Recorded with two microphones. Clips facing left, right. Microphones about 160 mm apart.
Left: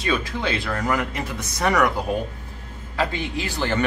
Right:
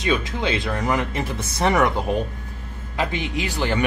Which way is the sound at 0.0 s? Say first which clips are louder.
Right 2 dB; 20° right (ahead or behind).